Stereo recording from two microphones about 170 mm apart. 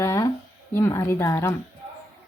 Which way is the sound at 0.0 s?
15° left (ahead or behind).